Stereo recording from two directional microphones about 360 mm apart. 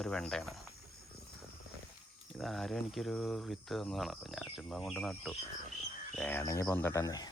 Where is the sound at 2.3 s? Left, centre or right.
Centre.